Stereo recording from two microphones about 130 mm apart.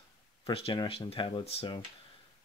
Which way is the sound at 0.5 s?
45° left (ahead or behind).